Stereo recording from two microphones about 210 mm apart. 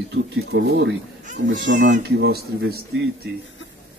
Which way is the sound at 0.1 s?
55° right (ahead or behind).